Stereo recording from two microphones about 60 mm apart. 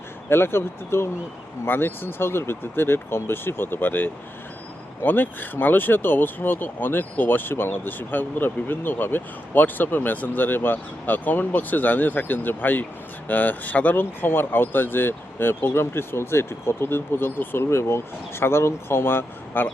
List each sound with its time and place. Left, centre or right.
0.3 s speech: left